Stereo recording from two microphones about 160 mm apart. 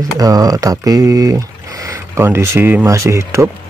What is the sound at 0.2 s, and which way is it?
Speech, 20° right (ahead or behind).